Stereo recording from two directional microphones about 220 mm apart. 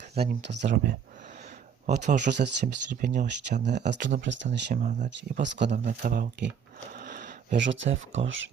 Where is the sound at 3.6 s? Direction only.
50° right (ahead or behind); by 5.1 s 35° right (ahead or behind).